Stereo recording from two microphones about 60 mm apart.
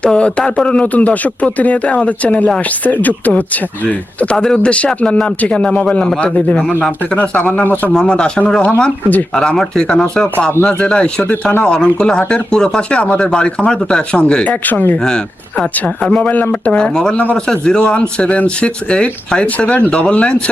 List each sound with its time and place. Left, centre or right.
0.0 s speech: centre
14.5 s speech: left
14.9 s speech: centre
16.2 s speech: left
16.6 s speech: centre